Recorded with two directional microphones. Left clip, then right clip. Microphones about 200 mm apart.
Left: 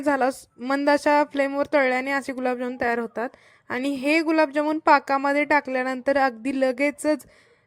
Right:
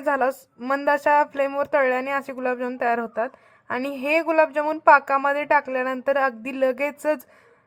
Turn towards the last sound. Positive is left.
turn(degrees=45)  # may be behind; listen again after turning